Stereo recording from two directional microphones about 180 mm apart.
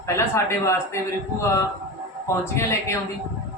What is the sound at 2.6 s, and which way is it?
Speech, 15° left (ahead or behind).